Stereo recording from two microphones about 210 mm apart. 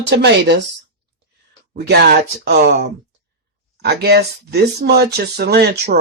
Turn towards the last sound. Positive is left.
turn(degrees=-50)  # may be behind; listen again after turning